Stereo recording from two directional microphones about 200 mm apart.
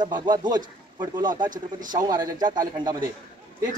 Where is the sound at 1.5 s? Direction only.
40° right (ahead or behind).